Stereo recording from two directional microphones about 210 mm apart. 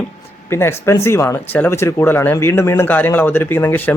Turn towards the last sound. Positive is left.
turn(degrees=10)  # may be behind; listen again after turning